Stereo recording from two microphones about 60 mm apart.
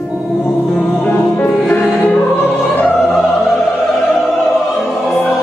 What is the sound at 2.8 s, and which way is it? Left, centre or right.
Opera, centre.